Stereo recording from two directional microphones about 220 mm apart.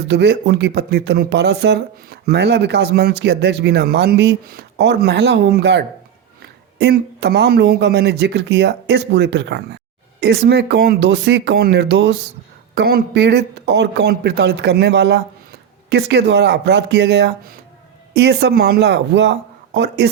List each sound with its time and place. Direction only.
0.1 s speech: 50° right (ahead or behind)